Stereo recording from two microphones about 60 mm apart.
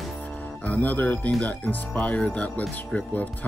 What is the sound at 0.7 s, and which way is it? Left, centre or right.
Speech, left.